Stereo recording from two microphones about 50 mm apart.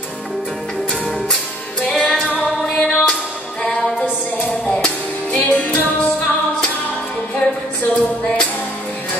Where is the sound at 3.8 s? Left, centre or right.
Centre.